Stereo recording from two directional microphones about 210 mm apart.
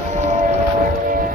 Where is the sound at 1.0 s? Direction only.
45° right (ahead or behind).